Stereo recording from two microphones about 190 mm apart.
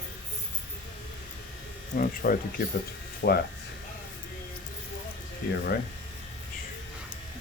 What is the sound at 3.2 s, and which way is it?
Speech, 65° left (ahead or behind).